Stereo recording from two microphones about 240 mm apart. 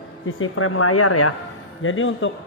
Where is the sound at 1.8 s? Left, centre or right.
Left.